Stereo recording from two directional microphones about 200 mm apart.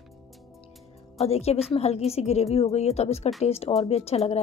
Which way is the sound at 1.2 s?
30° left (ahead or behind).